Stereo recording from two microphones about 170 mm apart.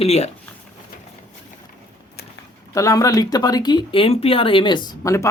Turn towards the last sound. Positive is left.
turn(degrees=20)  # may be behind; listen again after turning